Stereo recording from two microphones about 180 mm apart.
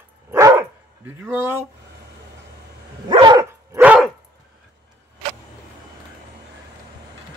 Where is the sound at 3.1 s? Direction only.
25° right (ahead or behind).